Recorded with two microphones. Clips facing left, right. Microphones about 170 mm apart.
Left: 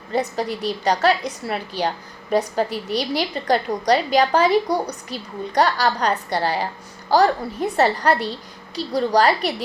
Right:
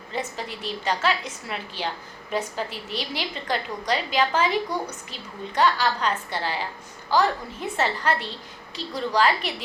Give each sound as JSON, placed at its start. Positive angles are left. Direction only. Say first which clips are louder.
{"t": 0.1, "sound": "a woman's voice", "louder": "left 9 dB", "side_deg": 40}